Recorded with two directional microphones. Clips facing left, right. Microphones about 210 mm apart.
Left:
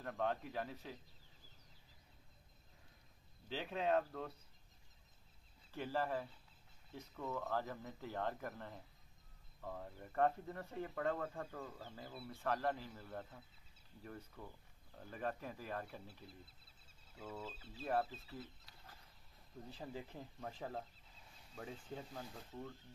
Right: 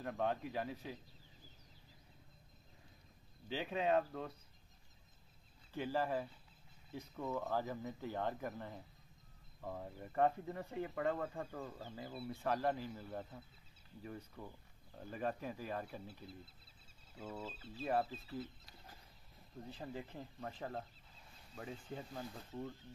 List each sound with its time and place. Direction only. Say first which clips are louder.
0.0 s speech: right 2 dB; 5° right (ahead or behind)
3.4 s speech: right 2 dB; 5° right (ahead or behind)
5.7 s speech: right 2 dB; 5° right (ahead or behind)
17.2 s speech: right 2 dB; 10° right (ahead or behind)
19.8 s speech: right 1 dB; 5° left (ahead or behind)